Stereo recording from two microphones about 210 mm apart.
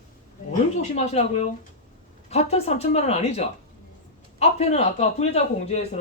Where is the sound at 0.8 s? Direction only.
30° left (ahead or behind).